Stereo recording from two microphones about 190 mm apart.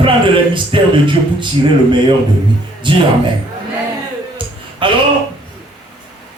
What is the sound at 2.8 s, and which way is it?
Music, 25° right (ahead or behind).